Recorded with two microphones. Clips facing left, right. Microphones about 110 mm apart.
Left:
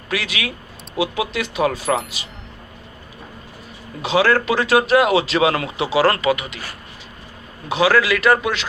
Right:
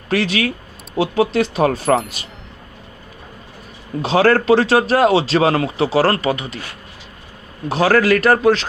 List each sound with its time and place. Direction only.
0.1 s speech: 40° right (ahead or behind)
4.0 s speech: 40° right (ahead or behind)
7.7 s speech: 45° right (ahead or behind)